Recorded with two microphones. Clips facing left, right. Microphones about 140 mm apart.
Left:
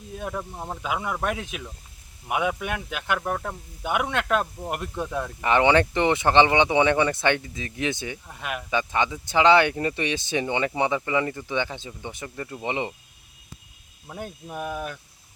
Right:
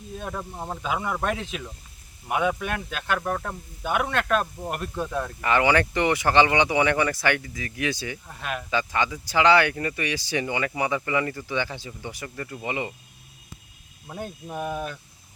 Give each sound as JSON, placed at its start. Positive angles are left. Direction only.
{"t": 0.2, "sound": "speech", "side_deg": 5}
{"t": 5.5, "sound": "speech", "side_deg": 20}
{"t": 14.1, "sound": "speech", "side_deg": 0}